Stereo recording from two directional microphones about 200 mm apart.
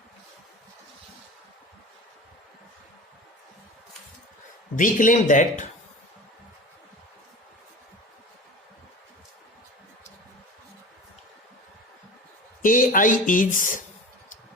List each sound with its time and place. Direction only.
4.8 s speech: 40° left (ahead or behind)
12.6 s speech: 40° left (ahead or behind)